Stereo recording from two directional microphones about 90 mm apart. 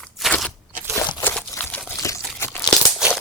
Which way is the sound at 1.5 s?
40° left (ahead or behind).